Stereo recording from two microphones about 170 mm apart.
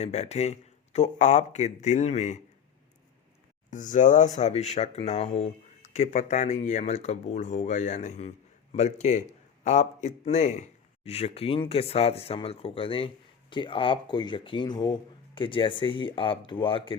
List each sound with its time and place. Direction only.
0.0 s speech: 40° left (ahead or behind)
3.7 s speech: 50° left (ahead or behind); by 17.0 s 30° left (ahead or behind)